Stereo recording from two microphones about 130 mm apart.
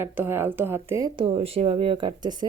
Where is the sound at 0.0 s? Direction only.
20° right (ahead or behind).